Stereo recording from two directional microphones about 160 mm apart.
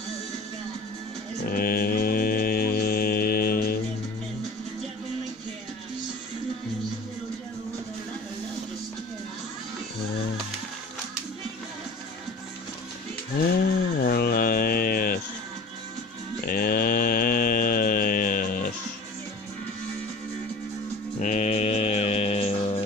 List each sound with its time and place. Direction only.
1.5 s mantra: 65° left (ahead or behind)
13.4 s mantra: 75° left (ahead or behind)
16.4 s mantra: 65° left (ahead or behind)
21.2 s mantra: 50° left (ahead or behind)